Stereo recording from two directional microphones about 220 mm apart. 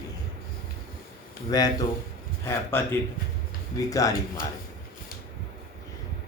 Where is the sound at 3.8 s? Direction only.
15° left (ahead or behind).